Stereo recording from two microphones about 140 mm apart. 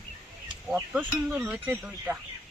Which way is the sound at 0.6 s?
5° right (ahead or behind).